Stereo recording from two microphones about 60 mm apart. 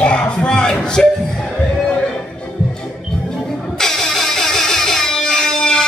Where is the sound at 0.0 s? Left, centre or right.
Centre.